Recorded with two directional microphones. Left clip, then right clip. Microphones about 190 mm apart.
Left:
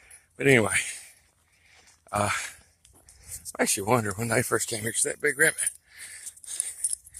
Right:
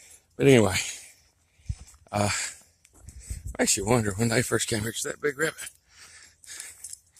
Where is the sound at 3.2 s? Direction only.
35° right (ahead or behind).